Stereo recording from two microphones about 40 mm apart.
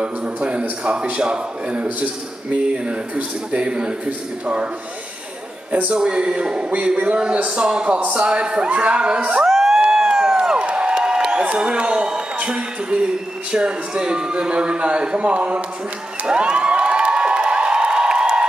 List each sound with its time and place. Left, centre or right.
0.0 s speech: right
5.7 s speech: right
5.9 s speech: right
9.5 s crowd: centre
9.8 s a sound: centre
10.6 s a man's voice: right
16.3 s a sound: right